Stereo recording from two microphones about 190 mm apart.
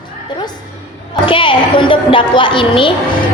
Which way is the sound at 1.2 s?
25° left (ahead or behind).